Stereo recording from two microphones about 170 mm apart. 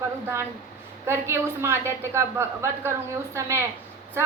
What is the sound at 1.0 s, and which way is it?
A woman's voice, 15° right (ahead or behind).